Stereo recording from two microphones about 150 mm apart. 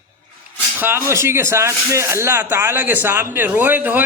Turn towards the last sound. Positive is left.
turn(degrees=-10)  # may be behind; listen again after turning